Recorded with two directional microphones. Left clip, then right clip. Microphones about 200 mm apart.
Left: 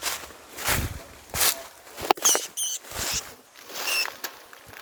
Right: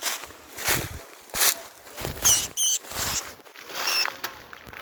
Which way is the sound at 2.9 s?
30° right (ahead or behind).